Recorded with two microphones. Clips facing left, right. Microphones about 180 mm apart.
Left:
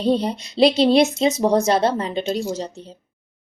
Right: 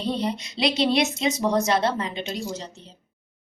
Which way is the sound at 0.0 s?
35° left (ahead or behind).